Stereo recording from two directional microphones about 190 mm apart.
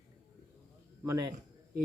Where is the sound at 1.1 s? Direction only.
15° right (ahead or behind).